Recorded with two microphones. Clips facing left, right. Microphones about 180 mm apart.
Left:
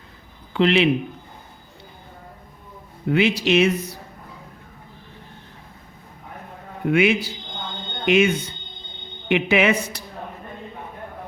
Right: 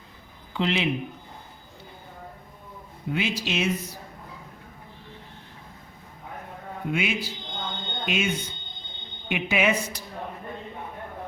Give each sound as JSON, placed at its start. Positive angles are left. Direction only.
{"t": 0.5, "sound": "speech", "side_deg": 75}
{"t": 3.1, "sound": "speech", "side_deg": 70}
{"t": 6.8, "sound": "speech", "side_deg": 70}